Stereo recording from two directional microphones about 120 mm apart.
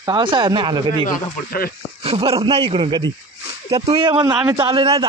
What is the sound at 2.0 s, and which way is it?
Speech, 50° right (ahead or behind).